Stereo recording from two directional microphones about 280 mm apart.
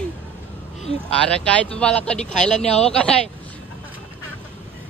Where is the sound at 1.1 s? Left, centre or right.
Centre.